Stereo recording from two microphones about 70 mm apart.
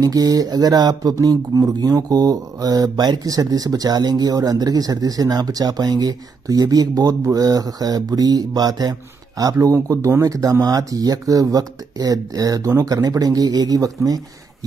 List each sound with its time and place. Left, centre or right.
0.0 s speech: right
1.1 s mantra: right
9.4 s speech: right
10.2 s mantra: right